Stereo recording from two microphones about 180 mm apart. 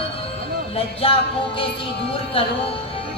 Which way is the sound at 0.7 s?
30° left (ahead or behind).